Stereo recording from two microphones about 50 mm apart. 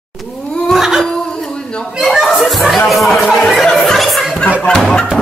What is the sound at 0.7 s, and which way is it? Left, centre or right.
Laughter, centre.